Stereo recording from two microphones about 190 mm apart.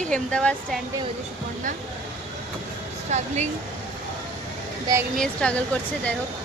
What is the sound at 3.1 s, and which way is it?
Speech, 40° right (ahead or behind).